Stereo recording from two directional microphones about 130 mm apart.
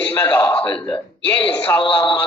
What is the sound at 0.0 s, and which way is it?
A man's voice, 15° left (ahead or behind).